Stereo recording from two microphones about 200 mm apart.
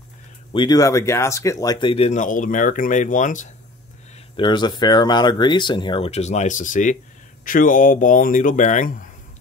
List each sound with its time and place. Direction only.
0.5 s speech: 20° left (ahead or behind); by 3.4 s 40° left (ahead or behind)
4.4 s speech: 20° left (ahead or behind); by 9.1 s 40° left (ahead or behind)